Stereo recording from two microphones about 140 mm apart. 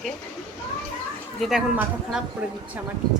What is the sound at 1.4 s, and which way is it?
Speech, 5° right (ahead or behind).